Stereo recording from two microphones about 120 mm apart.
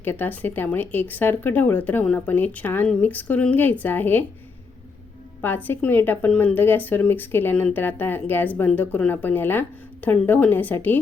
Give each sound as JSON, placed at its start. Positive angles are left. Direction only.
{"t": 0.0, "sound": "speech", "side_deg": 15}
{"t": 5.6, "sound": "speech", "side_deg": 15}